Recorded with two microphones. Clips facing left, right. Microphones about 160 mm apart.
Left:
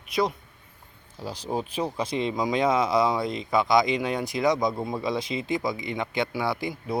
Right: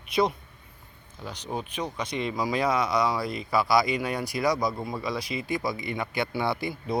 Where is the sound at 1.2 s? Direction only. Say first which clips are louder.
Left 4 dB; 35° left (ahead or behind).